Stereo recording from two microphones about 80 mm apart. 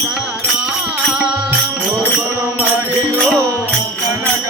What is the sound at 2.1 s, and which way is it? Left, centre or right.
Music, right.